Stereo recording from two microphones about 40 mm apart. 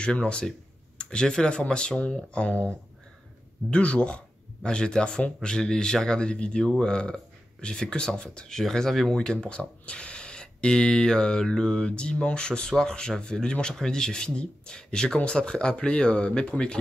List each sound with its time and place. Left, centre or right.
0.0 s speech: left
3.7 s speech: left
6.2 s speech: left; by 9.1 s centre
9.1 s speech: centre